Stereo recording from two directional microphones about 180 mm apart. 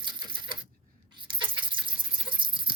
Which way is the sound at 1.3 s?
25° right (ahead or behind).